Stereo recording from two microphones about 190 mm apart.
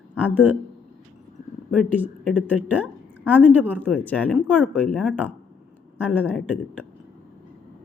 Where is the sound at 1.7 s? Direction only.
Centre (ahead or behind).